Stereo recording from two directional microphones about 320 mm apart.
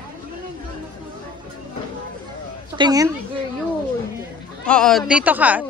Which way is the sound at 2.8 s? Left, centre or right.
Centre.